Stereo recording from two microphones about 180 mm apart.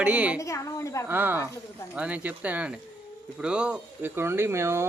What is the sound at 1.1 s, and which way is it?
Speech, 10° right (ahead or behind).